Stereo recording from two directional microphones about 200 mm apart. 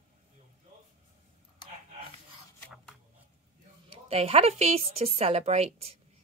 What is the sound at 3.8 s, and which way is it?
A woman's voice, 30° right (ahead or behind).